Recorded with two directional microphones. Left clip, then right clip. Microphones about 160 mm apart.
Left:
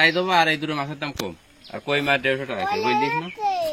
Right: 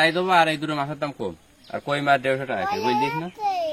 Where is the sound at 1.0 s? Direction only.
15° right (ahead or behind).